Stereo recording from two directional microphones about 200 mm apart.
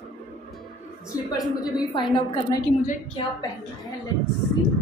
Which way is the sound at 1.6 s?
20° left (ahead or behind).